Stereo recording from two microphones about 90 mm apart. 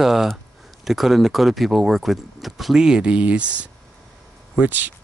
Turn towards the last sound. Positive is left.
turn(degrees=-20)  # may be behind; listen again after turning